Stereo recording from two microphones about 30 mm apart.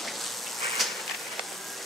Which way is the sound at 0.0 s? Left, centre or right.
Centre.